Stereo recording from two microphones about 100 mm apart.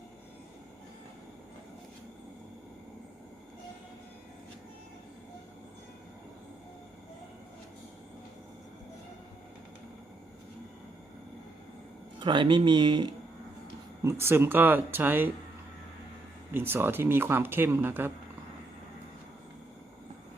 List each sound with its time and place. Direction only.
12.2 s speech: 55° right (ahead or behind)
14.0 s speech: 25° right (ahead or behind)
16.6 s speech: 20° right (ahead or behind)